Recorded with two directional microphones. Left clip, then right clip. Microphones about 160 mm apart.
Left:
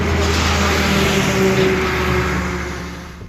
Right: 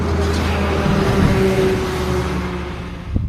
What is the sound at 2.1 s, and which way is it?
Vehicle, 5° right (ahead or behind).